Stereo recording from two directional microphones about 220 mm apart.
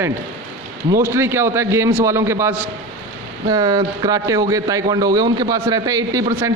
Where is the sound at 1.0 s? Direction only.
10° right (ahead or behind).